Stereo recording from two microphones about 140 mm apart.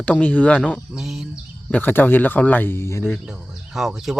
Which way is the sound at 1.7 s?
15° left (ahead or behind).